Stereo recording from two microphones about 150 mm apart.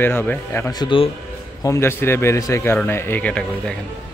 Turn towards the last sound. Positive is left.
turn(degrees=10)  # may be behind; listen again after turning